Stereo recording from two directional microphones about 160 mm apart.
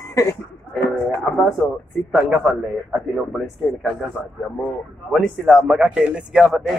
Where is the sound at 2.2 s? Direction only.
10° right (ahead or behind).